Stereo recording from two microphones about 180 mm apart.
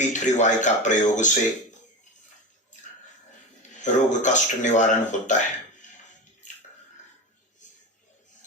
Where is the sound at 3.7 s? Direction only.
45° left (ahead or behind).